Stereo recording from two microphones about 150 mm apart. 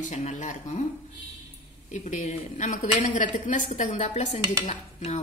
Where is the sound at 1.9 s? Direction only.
55° left (ahead or behind).